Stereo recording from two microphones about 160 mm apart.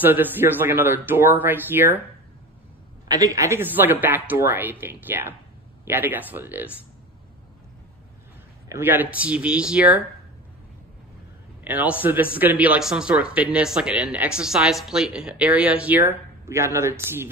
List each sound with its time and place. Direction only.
0.0 s speech: 10° right (ahead or behind)
3.1 s speech: 20° right (ahead or behind)
8.6 s speech: 15° right (ahead or behind)
11.6 s speech: 10° right (ahead or behind)